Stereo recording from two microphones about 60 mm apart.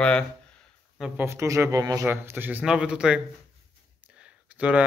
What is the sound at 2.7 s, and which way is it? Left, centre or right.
Speech, centre.